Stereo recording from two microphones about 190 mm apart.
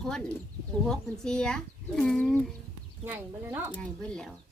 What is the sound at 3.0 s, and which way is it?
Speech, 10° right (ahead or behind).